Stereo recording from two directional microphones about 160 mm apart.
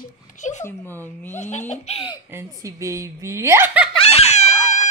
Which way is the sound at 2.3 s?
20° right (ahead or behind).